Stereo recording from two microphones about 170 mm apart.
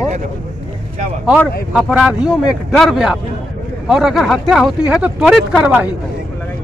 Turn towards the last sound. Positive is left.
turn(degrees=-5)  # may be behind; listen again after turning